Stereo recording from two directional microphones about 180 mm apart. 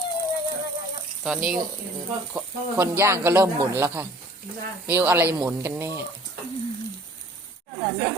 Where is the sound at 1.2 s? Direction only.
5° right (ahead or behind).